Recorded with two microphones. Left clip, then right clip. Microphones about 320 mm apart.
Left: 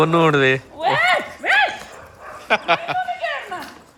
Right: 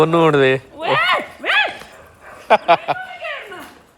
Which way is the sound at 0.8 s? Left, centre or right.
Centre.